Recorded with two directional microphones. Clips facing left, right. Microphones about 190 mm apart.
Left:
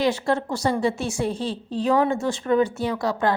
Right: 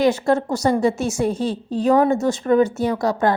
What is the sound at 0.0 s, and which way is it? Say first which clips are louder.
A woman's voice: right 5 dB; 45° right (ahead or behind).